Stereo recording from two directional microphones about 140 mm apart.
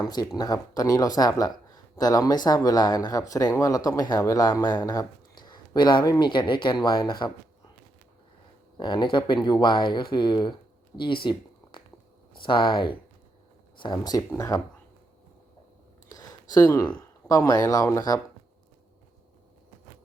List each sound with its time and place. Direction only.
0.0 s speech: 30° left (ahead or behind)
8.8 s speech: 35° left (ahead or behind)
16.0 s a sound: 25° left (ahead or behind)
17.2 s speech: 25° left (ahead or behind)